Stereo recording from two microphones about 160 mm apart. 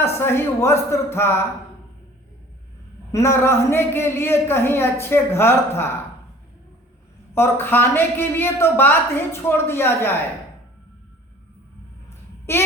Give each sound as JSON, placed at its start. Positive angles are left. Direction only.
{"t": 0.0, "sound": "a man's voice", "side_deg": 15}
{"t": 3.1, "sound": "a man's voice", "side_deg": 15}
{"t": 7.3, "sound": "a man's voice", "side_deg": 15}